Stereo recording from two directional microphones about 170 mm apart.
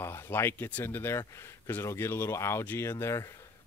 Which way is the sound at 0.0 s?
15° left (ahead or behind).